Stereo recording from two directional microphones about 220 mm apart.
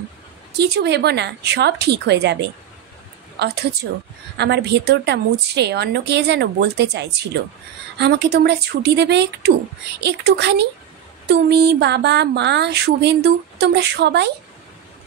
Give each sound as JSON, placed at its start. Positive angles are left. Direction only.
{"t": 0.6, "sound": "speech", "side_deg": -50}
{"t": 3.3, "sound": "a woman's voice", "side_deg": -50}